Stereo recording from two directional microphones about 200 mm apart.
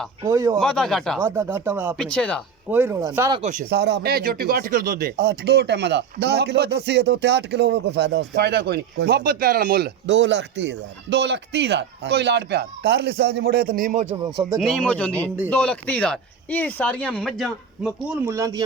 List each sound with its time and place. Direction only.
0.3 s speech: 15° right (ahead or behind)
0.6 s speech: centre (ahead or behind)
1.2 s speech: 10° right (ahead or behind)
2.0 s speech: 5° left (ahead or behind)
2.6 s speech: 10° right (ahead or behind)
3.3 s speech: 35° right (ahead or behind)
3.7 s speech: 55° right (ahead or behind); by 14.1 s 40° right (ahead or behind)
14.6 s speech: 5° left (ahead or behind)
18.3 s speech: 15° right (ahead or behind)